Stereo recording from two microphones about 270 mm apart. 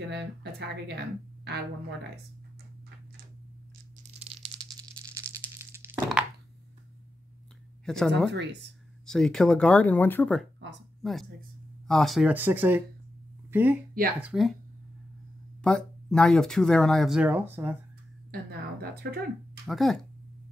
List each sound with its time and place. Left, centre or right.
0.1 s speech: right
4.3 s rattle: centre
7.8 s speech: centre
8.3 s speech: right
9.0 s speech: centre
15.6 s speech: centre
19.0 s speech: right
19.6 s speech: centre